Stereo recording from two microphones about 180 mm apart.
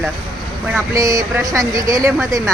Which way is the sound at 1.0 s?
20° right (ahead or behind).